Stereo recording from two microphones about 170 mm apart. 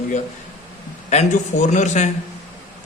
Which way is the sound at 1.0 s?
45° left (ahead or behind).